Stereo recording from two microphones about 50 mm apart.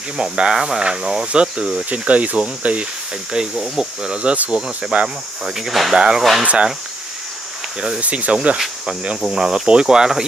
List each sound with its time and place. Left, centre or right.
0.2 s speech: centre
1.9 s speech: right
3.3 s speech: centre
5.4 s cricket: centre
6.4 s speech: right
8.0 s speech: right
9.3 s speech: centre